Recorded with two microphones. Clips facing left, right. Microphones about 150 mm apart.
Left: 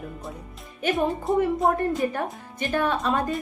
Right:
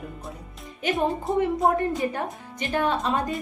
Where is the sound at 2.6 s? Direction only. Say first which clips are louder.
Even; 20° right (ahead or behind).